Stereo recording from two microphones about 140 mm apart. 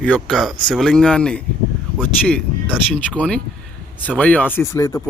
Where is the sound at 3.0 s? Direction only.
10° left (ahead or behind).